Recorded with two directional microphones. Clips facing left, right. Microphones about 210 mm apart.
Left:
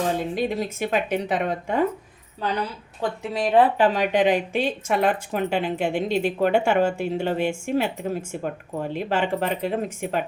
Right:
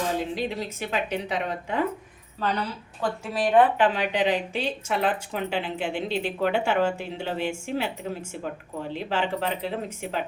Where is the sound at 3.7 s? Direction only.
40° left (ahead or behind).